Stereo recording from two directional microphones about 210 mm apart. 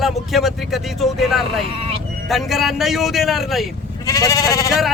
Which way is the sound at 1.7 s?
30° right (ahead or behind).